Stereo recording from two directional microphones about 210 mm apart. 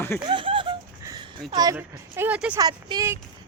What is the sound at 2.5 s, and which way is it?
Speech, 20° right (ahead or behind).